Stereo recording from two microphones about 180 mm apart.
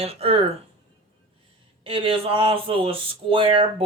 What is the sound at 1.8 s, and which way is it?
Speech, 30° right (ahead or behind).